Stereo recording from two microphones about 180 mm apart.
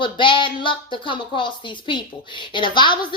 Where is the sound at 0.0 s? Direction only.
25° left (ahead or behind).